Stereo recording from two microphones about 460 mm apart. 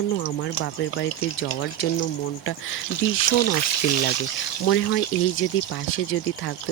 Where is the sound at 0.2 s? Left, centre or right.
Left.